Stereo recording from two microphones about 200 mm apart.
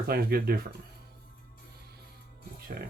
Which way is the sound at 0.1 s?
50° right (ahead or behind).